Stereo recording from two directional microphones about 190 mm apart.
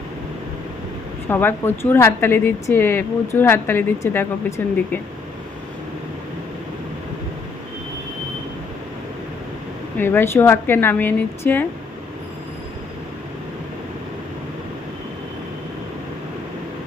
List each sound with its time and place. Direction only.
1.3 s a woman's voice: 10° left (ahead or behind)
10.0 s a woman's voice: 10° left (ahead or behind)